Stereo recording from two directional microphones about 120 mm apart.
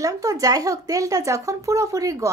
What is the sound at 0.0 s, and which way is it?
Speech, 30° right (ahead or behind).